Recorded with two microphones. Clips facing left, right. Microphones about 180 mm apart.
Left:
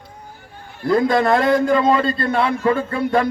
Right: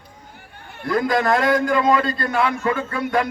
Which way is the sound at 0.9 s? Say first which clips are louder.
Left 3 dB; 25° left (ahead or behind).